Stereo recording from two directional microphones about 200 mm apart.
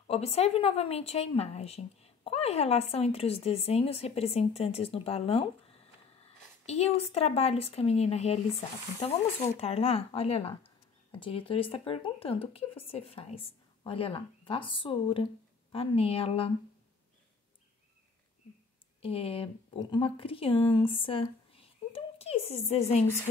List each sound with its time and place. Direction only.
0.0 s speech: 30° left (ahead or behind)
6.6 s speech: 30° left (ahead or behind)
9.6 s speech: 30° left (ahead or behind)
18.9 s speech: 30° left (ahead or behind)